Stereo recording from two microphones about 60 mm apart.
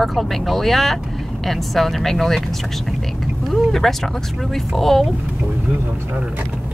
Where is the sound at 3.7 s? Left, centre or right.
Centre.